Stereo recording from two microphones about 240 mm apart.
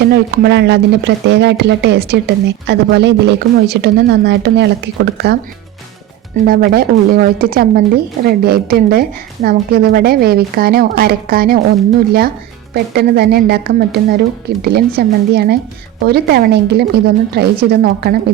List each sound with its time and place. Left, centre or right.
0.0 s speech: right
12.7 s speech: right